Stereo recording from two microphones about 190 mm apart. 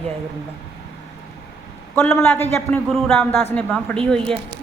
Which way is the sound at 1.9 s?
5° left (ahead or behind).